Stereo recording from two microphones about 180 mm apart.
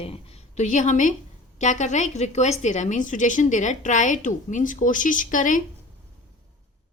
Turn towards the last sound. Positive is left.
turn(degrees=45)  # may be behind; listen again after turning